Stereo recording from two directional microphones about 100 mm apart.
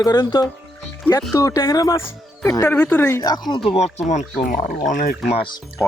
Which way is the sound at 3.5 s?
60° left (ahead or behind).